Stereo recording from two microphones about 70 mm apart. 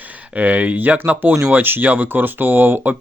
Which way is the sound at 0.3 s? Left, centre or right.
Right.